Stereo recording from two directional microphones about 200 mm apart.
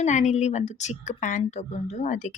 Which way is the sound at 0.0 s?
35° left (ahead or behind).